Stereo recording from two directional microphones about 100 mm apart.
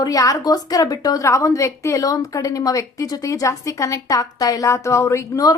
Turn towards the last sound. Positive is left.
turn(degrees=35)  # may be behind; listen again after turning